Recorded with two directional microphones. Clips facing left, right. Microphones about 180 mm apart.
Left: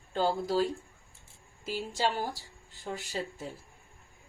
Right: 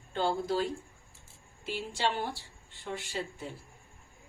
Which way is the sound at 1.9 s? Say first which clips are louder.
Left 1 dB; 40° left (ahead or behind).